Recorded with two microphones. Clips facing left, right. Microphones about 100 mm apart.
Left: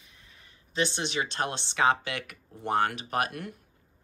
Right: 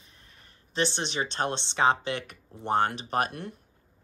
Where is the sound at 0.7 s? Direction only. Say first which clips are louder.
Even; 30° right (ahead or behind).